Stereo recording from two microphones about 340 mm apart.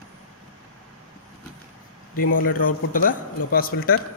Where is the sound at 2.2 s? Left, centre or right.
Left.